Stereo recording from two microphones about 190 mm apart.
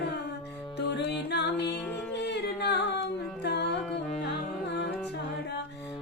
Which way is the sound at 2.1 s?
65° left (ahead or behind).